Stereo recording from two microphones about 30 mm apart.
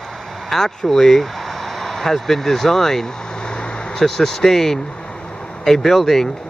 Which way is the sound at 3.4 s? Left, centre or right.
Left.